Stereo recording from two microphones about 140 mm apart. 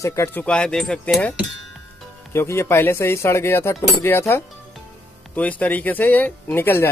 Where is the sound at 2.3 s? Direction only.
20° left (ahead or behind).